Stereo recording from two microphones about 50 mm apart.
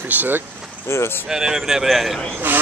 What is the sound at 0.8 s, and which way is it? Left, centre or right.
Vehicle, left.